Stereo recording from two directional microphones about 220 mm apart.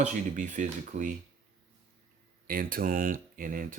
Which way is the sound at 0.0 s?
35° right (ahead or behind).